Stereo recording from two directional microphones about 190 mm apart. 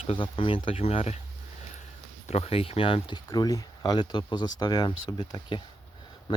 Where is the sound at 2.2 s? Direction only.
35° left (ahead or behind).